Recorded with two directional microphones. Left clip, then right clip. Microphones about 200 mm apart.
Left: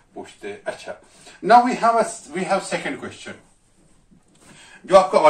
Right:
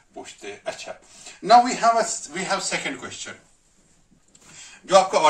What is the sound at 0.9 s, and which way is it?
Speech, 40° right (ahead or behind).